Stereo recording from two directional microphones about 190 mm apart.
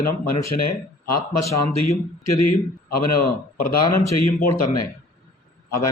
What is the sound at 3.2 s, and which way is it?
Speech, 50° left (ahead or behind).